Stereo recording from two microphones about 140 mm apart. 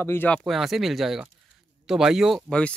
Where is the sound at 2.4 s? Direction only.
10° left (ahead or behind).